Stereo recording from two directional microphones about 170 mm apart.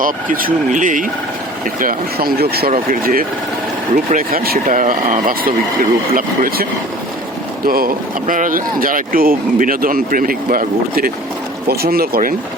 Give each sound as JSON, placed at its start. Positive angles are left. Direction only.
{"t": 0.0, "sound": "speech", "side_deg": -55}
{"t": 2.7, "sound": "speech", "side_deg": -55}
{"t": 7.7, "sound": "speech", "side_deg": -60}